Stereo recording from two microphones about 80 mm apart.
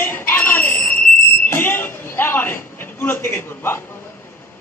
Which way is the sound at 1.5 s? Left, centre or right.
Left.